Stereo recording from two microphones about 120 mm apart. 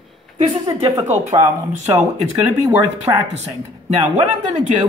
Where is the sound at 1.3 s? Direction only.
55° right (ahead or behind).